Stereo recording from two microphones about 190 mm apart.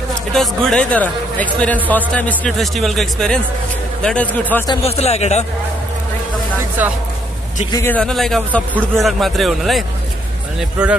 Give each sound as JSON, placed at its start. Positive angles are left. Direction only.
{"t": 0.3, "sound": "a man's voice", "side_deg": 0}
{"t": 4.8, "sound": "a man's voice", "side_deg": 35}
{"t": 7.7, "sound": "speech", "side_deg": 10}